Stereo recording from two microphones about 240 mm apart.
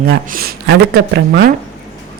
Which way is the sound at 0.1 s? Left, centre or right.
Right.